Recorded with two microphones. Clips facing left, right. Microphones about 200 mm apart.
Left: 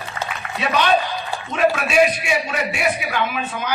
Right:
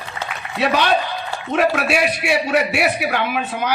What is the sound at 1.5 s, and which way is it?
A man's voice, 65° right (ahead or behind).